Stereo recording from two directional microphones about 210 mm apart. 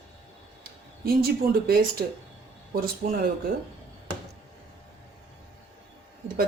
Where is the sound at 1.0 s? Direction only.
45° right (ahead or behind).